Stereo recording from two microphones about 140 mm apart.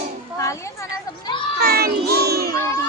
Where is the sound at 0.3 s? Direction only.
20° left (ahead or behind).